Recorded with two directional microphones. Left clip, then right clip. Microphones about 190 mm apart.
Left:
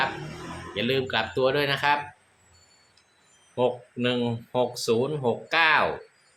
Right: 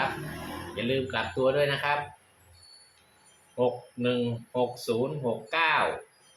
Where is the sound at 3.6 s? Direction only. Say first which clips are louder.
Left 2 dB; 60° left (ahead or behind).